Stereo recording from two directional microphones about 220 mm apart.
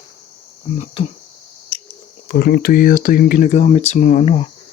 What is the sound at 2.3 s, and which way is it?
Speech, 45° left (ahead or behind).